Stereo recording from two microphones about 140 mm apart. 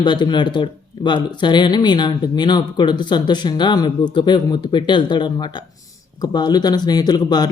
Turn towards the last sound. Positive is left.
turn(degrees=30)  # may be behind; listen again after turning